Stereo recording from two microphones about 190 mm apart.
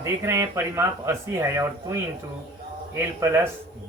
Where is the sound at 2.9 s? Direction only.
15° right (ahead or behind).